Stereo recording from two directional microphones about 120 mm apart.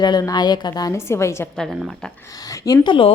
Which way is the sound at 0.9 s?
25° left (ahead or behind).